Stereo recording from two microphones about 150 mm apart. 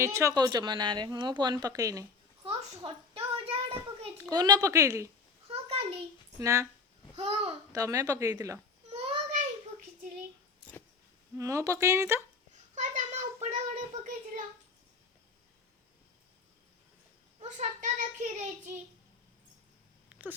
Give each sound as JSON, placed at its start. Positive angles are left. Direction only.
{"t": 0.0, "sound": "a woman's voice", "side_deg": -20}
{"t": 2.4, "sound": "a sound", "side_deg": -40}
{"t": 4.2, "sound": "a woman's voice", "side_deg": -25}
{"t": 5.5, "sound": "a sound", "side_deg": -40}
{"t": 6.4, "sound": "a woman's voice", "side_deg": -20}
{"t": 7.2, "sound": "a child's voice", "side_deg": -45}
{"t": 7.7, "sound": "a woman's voice", "side_deg": -20}
{"t": 8.9, "sound": "child singing", "side_deg": -40}
{"t": 11.3, "sound": "a woman's voice", "side_deg": -20}
{"t": 12.7, "sound": "a sound", "side_deg": -50}
{"t": 17.4, "sound": "a child's voice", "side_deg": -55}
{"t": 20.1, "sound": "wheeze", "side_deg": -10}